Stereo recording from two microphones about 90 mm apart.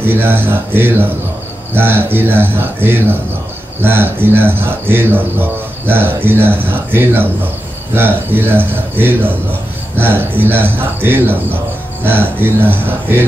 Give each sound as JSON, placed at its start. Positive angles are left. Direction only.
{"t": 0.0, "sound": "speech", "side_deg": -25}